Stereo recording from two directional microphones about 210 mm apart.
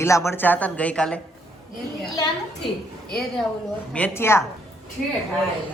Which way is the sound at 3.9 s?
10° left (ahead or behind).